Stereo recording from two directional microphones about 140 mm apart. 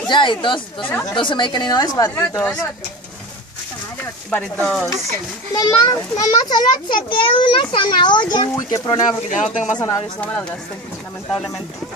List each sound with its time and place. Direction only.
0.1 s a child's voice: 35° left (ahead or behind)
0.8 s stir: 15° left (ahead or behind)
1.1 s a child's voice: 35° left (ahead or behind); by 2.5 s 15° left (ahead or behind)
4.3 s stir: 10° left (ahead or behind)
5.5 s a child's voice: 25° left (ahead or behind)
9.3 s speech: 60° left (ahead or behind)
9.8 s a child's voice: 25° left (ahead or behind)
10.2 s stir: 10° left (ahead or behind)
11.2 s speech: 5° left (ahead or behind)